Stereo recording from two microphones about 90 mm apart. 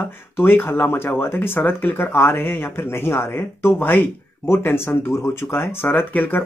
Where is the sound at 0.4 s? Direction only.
25° left (ahead or behind).